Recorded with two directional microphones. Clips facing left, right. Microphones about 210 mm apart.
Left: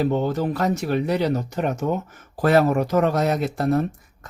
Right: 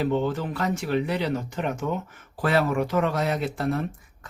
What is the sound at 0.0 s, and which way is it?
A man's voice, 40° left (ahead or behind).